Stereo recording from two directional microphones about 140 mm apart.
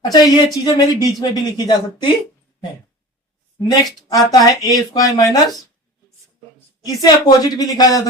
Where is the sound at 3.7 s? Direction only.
25° left (ahead or behind).